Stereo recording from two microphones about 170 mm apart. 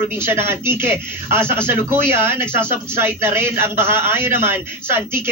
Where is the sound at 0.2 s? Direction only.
15° right (ahead or behind).